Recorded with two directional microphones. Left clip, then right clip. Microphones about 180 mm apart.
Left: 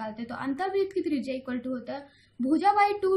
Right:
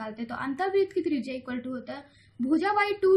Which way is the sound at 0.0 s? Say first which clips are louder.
Even; 10° right (ahead or behind).